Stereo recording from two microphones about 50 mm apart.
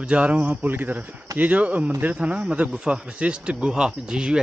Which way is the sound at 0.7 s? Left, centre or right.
Right.